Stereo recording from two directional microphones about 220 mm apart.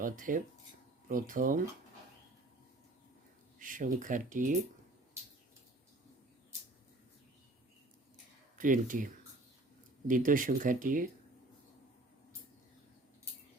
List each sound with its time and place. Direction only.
0.0 s speech: 35° right (ahead or behind)
3.6 s speech: 35° right (ahead or behind)
8.5 s speech: 35° right (ahead or behind)
10.1 s speech: 40° right (ahead or behind)